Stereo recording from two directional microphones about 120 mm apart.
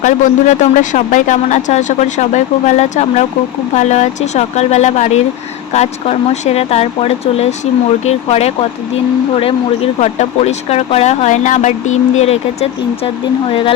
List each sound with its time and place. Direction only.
0.0 s speech: 90° left
12.1 s speech: 60° left (ahead or behind)